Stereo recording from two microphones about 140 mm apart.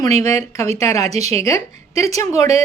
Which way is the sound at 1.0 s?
50° right (ahead or behind).